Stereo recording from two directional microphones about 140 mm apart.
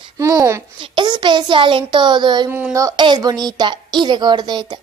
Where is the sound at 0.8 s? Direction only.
35° right (ahead or behind).